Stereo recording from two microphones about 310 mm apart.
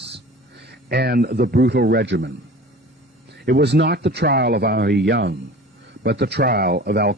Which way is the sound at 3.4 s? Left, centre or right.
Right.